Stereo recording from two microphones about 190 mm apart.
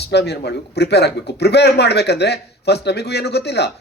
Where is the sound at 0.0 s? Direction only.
60° left (ahead or behind).